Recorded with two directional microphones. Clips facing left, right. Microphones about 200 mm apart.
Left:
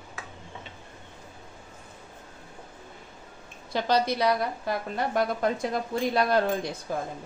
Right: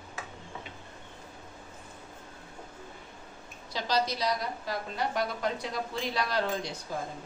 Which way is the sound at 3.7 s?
55° left (ahead or behind).